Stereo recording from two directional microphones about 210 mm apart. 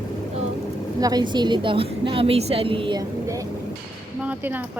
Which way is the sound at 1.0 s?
20° right (ahead or behind).